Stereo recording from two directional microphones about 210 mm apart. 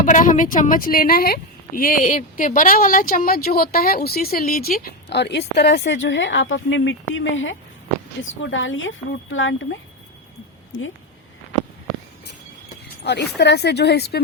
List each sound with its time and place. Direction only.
0.0 s speech: 35° left (ahead or behind); by 9.6 s 65° left (ahead or behind)
10.7 s speech: 65° left (ahead or behind)
13.1 s speech: 55° left (ahead or behind)